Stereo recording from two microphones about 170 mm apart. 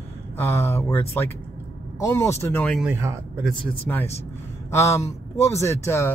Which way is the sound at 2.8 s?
15° right (ahead or behind).